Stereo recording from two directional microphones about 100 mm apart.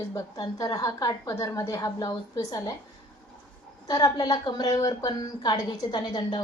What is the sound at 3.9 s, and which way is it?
A woman's voice, 35° left (ahead or behind).